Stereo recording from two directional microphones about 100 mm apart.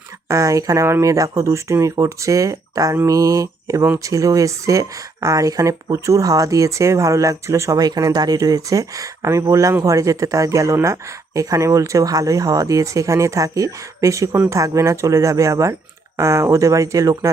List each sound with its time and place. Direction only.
0.3 s speech: 30° right (ahead or behind)